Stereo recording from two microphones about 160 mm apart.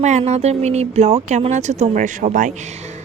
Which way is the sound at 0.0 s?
45° right (ahead or behind).